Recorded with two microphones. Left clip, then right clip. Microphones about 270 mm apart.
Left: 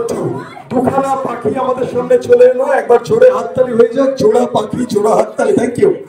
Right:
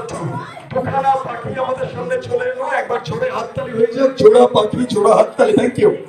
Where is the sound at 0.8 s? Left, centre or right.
Left; by 5.8 s centre.